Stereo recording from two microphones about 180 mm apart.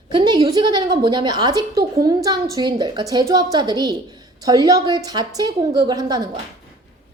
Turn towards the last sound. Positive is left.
turn(degrees=-20)  # may be behind; listen again after turning